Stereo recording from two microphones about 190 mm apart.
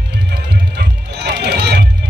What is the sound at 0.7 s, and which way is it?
Music, 60° right (ahead or behind).